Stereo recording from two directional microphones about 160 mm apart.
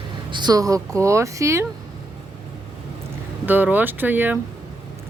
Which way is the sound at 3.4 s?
10° right (ahead or behind).